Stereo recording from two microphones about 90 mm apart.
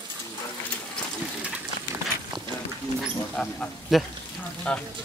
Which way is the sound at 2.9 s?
10° left (ahead or behind).